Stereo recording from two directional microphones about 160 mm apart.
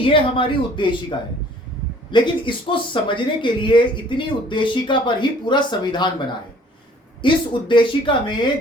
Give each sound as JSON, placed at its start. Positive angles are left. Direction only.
{"t": 0.0, "sound": "speech", "side_deg": 30}